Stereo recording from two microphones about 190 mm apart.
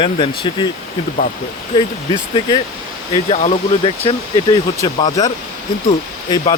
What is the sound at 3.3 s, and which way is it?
Speech, 35° left (ahead or behind).